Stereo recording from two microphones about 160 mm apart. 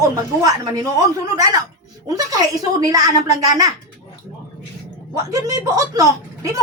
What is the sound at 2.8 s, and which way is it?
Speech, 20° right (ahead or behind).